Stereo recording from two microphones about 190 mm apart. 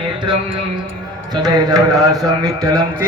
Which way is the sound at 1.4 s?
20° right (ahead or behind).